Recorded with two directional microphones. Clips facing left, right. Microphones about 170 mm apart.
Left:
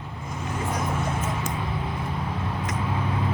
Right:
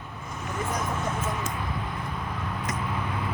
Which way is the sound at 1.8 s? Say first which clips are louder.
Left 3 dB; 10° left (ahead or behind).